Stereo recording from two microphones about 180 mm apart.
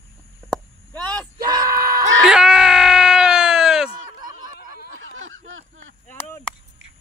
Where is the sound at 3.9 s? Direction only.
25° right (ahead or behind).